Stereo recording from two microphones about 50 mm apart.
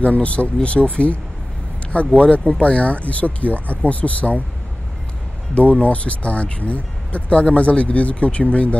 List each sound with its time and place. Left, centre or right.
0.0 s speech: left
5.5 s speech: left